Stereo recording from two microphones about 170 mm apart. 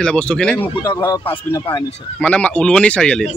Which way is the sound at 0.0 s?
5° left (ahead or behind).